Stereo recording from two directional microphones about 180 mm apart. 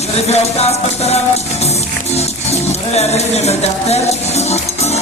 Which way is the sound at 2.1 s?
35° left (ahead or behind).